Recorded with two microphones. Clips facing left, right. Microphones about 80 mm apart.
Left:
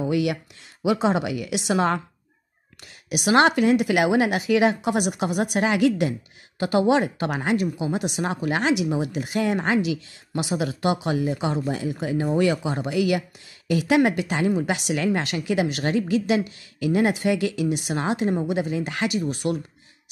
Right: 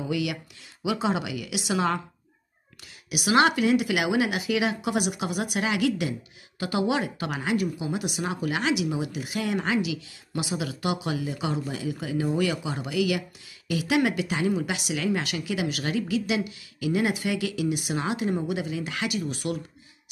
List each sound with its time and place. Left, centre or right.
0.1 s speech: left
3.1 s speech: left
7.5 s speech: left